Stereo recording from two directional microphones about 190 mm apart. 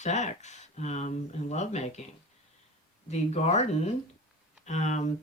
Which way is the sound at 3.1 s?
35° left (ahead or behind).